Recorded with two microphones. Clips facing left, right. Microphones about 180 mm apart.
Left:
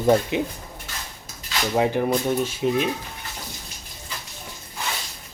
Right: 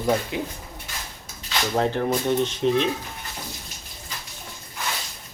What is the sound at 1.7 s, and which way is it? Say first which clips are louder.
Speech: left 2 dB; 10° left (ahead or behind).